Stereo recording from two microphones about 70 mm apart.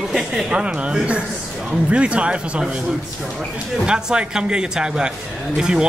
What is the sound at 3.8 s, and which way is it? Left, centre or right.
Speech, centre.